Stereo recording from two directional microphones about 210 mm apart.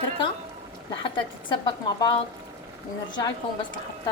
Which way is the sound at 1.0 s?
25° left (ahead or behind).